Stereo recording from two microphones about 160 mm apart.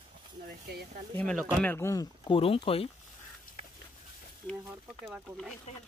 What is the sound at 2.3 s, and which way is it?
Speech, 35° left (ahead or behind).